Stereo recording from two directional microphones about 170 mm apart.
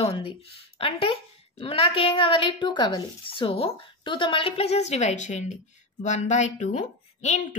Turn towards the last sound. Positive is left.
turn(degrees=45)  # may be behind; listen again after turning